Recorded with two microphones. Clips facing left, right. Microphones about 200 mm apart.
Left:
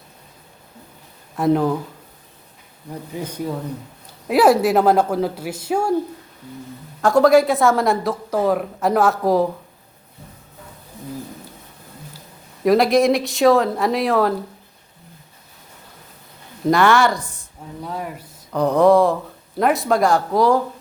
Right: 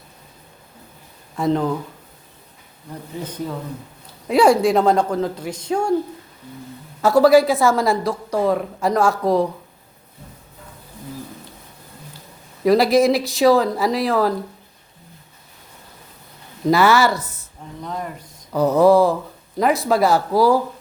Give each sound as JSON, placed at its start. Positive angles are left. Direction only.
{"t": 1.4, "sound": "speech", "side_deg": 10}
{"t": 3.1, "sound": "speech", "side_deg": 10}
{"t": 7.0, "sound": "speech", "side_deg": -5}
{"t": 12.6, "sound": "speech", "side_deg": 0}
{"t": 16.6, "sound": "speech", "side_deg": -5}
{"t": 17.8, "sound": "speech", "side_deg": 5}
{"t": 18.5, "sound": "speech", "side_deg": -5}